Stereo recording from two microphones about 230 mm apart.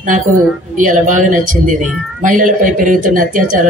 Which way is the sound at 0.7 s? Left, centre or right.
Right.